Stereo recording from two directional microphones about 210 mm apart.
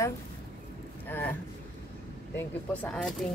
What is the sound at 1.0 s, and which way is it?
Boat, 10° left (ahead or behind).